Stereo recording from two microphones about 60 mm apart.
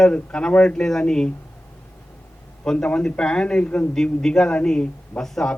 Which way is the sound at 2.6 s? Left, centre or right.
Centre.